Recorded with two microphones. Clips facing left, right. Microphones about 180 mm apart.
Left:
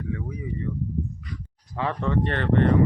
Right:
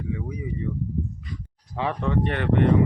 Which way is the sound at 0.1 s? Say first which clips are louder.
Right 2 dB; 15° right (ahead or behind).